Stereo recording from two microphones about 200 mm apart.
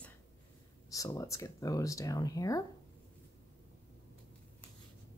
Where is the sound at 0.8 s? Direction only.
15° left (ahead or behind).